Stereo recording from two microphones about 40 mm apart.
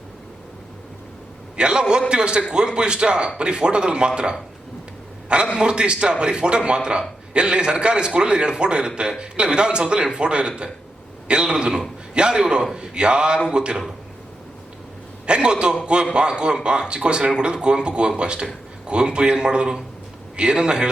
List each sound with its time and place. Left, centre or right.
1.5 s a man's voice: right
15.3 s a man's voice: right